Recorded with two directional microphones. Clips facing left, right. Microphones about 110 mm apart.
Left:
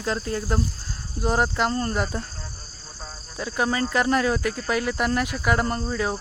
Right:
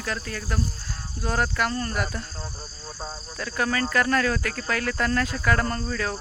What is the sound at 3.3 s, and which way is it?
Speech, 20° left (ahead or behind).